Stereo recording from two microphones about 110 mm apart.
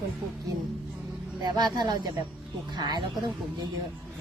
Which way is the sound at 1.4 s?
40° right (ahead or behind).